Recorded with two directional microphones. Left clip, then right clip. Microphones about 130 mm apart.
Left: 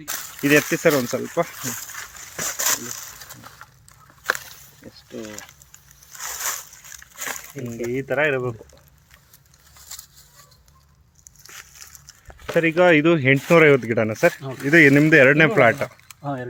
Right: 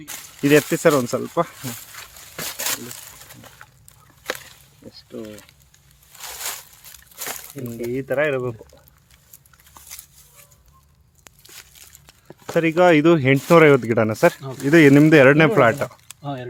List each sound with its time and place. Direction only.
0.7 s speech: 30° right (ahead or behind)
3.6 s chicken: 30° right (ahead or behind)
7.9 s speech: 10° right (ahead or behind)
12.5 s speech: 20° right (ahead or behind)
16.2 s speech: 5° right (ahead or behind)